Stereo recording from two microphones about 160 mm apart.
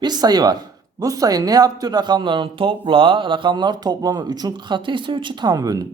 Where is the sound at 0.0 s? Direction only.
25° right (ahead or behind).